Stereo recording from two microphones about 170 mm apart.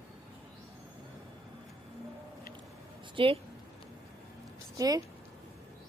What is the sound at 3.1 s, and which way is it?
Speech, 30° right (ahead or behind).